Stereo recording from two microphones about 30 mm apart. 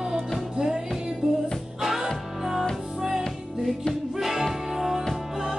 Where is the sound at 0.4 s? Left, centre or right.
Centre.